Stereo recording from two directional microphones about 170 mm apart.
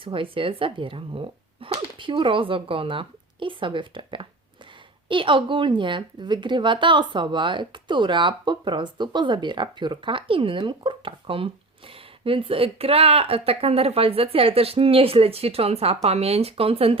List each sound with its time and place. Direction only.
0.0 s speech: 30° right (ahead or behind)